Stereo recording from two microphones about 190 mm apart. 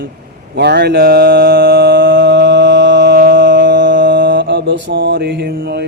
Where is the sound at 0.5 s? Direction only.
60° right (ahead or behind).